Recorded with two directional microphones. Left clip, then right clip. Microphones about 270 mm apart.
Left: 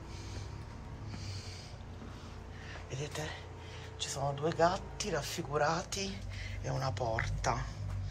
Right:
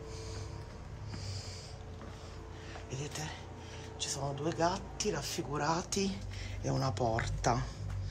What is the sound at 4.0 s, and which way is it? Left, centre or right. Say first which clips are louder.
Speech: left 2 dB; centre.